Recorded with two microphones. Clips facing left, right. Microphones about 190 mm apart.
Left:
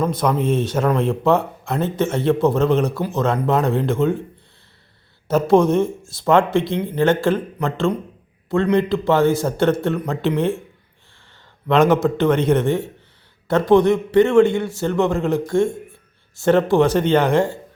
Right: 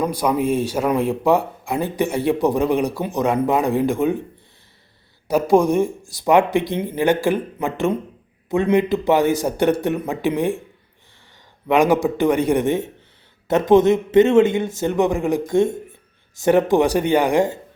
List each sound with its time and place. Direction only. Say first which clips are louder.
0.0 s speech: even; 10° right (ahead or behind)
5.3 s speech: left 1 dB; 10° right (ahead or behind)
11.7 s a man's voice: left 1 dB; 15° right (ahead or behind)